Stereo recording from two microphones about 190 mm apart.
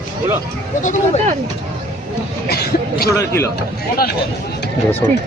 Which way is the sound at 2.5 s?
55° left (ahead or behind).